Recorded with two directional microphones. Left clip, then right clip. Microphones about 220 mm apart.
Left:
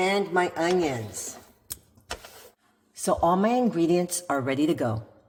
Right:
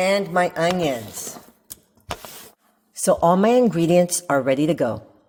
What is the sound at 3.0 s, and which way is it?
A woman's voice, 35° right (ahead or behind).